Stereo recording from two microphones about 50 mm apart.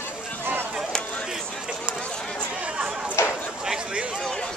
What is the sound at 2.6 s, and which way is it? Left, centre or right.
Chatter, centre.